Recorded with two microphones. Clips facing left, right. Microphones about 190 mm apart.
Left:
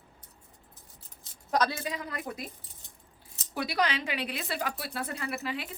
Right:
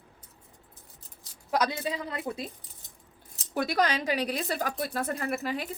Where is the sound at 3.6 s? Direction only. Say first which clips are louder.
Right 3 dB; 45° right (ahead or behind).